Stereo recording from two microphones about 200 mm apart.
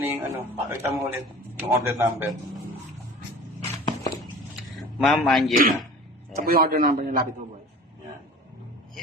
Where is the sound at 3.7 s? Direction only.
20° left (ahead or behind).